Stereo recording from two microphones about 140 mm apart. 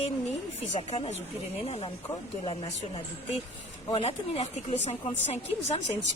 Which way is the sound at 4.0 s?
50° left (ahead or behind).